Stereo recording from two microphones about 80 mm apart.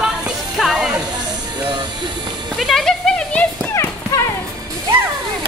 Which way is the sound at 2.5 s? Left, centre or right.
Centre.